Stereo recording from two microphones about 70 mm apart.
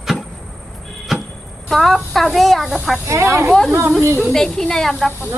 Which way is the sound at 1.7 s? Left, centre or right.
Centre.